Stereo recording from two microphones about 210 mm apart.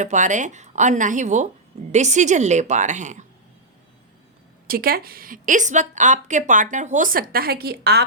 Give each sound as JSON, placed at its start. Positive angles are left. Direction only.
{"t": 0.0, "sound": "a woman's voice", "side_deg": -35}
{"t": 4.6, "sound": "a woman's voice", "side_deg": -45}